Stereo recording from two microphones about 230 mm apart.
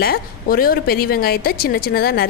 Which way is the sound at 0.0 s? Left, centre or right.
Left.